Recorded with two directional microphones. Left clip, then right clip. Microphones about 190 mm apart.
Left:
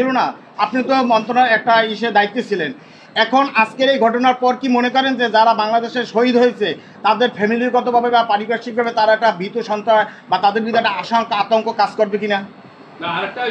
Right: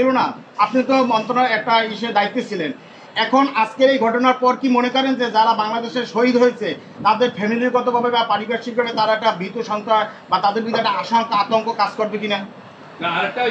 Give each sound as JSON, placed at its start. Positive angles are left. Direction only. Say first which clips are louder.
{"t": 0.0, "sound": "a man's voice", "louder": "even", "side_deg": 65}